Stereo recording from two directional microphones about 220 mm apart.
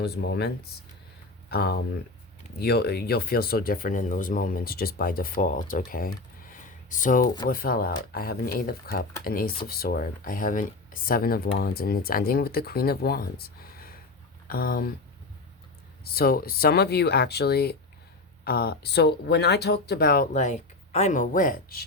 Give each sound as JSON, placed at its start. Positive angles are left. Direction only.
{"t": 0.0, "sound": "speech", "side_deg": 50}
{"t": 16.1, "sound": "speech", "side_deg": 45}